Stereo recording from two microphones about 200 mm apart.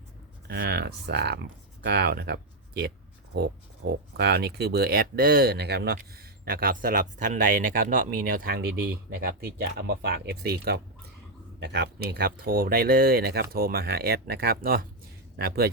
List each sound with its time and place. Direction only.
0.4 s speech: 55° right (ahead or behind)
4.2 s speech: 55° right (ahead or behind)